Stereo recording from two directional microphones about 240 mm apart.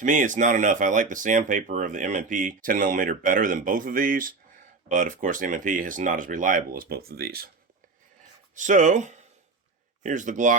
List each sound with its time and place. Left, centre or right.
0.0 s speech: right
8.5 s speech: right